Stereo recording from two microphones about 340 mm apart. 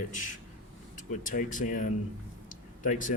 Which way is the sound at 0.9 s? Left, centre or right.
Left.